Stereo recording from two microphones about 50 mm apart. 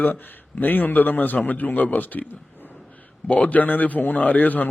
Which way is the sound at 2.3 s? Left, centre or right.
Left.